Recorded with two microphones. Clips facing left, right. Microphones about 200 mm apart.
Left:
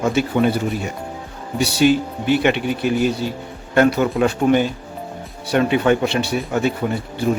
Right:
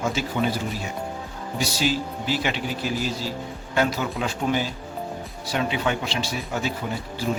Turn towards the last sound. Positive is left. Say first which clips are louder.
# left 7 dB
turn(degrees=60)  # may be behind; listen again after turning